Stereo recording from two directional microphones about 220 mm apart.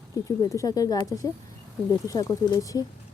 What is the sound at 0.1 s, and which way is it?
Speech, 15° left (ahead or behind).